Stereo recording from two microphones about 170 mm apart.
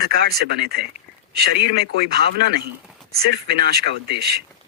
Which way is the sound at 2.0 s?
70° right (ahead or behind).